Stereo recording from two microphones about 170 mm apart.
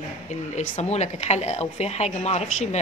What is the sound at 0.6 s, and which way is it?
A woman's voice, 40° left (ahead or behind).